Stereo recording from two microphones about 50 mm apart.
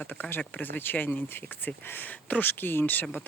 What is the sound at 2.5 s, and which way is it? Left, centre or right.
Speech, left.